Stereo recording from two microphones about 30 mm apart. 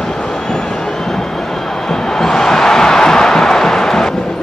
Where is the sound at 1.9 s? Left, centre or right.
Centre.